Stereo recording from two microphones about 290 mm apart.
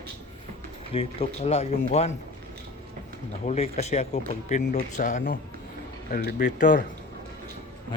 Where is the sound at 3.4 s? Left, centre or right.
Left.